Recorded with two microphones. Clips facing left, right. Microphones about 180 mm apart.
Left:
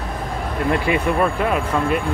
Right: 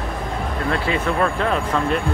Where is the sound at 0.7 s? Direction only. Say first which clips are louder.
Left 3 dB; 15° left (ahead or behind).